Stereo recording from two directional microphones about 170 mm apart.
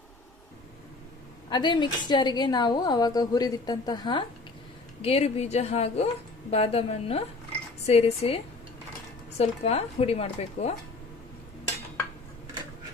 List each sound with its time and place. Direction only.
1.5 s a woman's voice: 25° left (ahead or behind)
5.0 s speech: 35° left (ahead or behind)
9.4 s speech: 40° left (ahead or behind)